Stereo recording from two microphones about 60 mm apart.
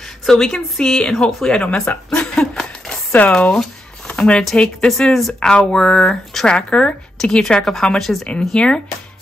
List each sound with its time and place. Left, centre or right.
0.3 s a woman's voice: centre
2.3 s laughter: centre
3.3 s a woman's voice: centre